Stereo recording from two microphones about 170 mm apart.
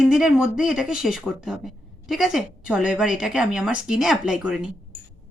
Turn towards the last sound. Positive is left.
turn(degrees=-5)  # may be behind; listen again after turning